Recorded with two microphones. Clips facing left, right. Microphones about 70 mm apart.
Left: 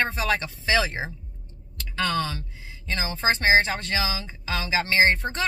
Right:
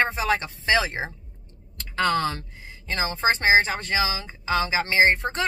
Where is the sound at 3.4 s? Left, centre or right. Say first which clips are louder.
Even; right.